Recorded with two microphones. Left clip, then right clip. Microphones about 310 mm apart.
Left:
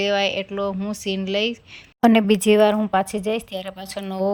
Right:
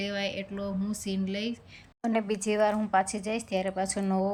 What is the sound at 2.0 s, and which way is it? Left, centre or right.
Speech, left.